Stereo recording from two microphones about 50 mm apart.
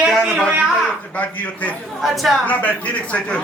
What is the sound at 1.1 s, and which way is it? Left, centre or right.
Speech, left.